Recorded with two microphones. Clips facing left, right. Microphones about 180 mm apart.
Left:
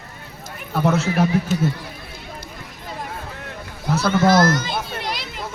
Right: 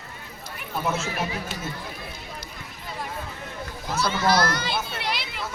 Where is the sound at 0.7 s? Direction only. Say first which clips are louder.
Left 8 dB; 70° left (ahead or behind).